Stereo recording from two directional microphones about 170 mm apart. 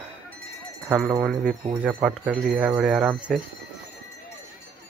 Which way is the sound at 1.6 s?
35° right (ahead or behind).